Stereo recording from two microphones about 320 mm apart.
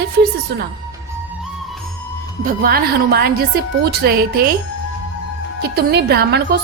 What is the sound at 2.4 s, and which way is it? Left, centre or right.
A woman's voice, right.